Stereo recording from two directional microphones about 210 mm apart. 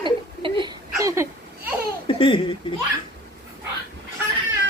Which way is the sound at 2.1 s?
25° left (ahead or behind).